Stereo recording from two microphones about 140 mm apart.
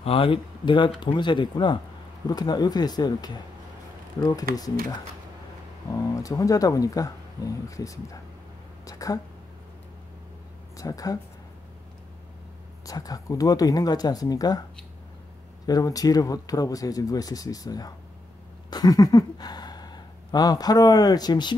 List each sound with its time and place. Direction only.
0.0 s speech: 40° left (ahead or behind)
5.9 s speech: 25° left (ahead or behind)
10.8 s speech: 25° left (ahead or behind)
12.8 s speech: 25° left (ahead or behind)
15.6 s speech: 25° left (ahead or behind)